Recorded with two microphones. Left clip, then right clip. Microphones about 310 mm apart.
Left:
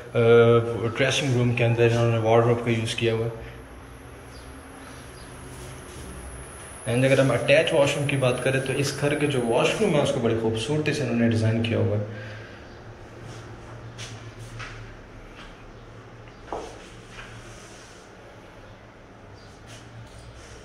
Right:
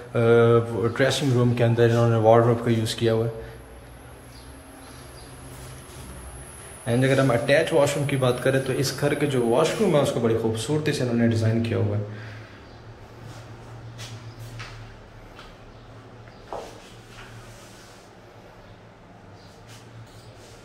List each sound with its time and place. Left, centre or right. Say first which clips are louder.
0.1 s a man's voice: left 1 dB; centre
6.9 s a man's voice: left 1 dB; centre